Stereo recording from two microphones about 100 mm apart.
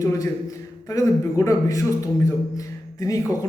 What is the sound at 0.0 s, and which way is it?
Speech, 35° left (ahead or behind).